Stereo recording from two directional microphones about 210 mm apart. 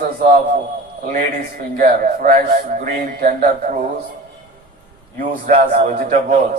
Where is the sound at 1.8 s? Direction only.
40° right (ahead or behind).